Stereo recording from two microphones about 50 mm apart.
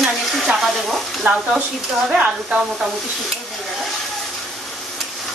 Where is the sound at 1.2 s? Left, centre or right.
Right.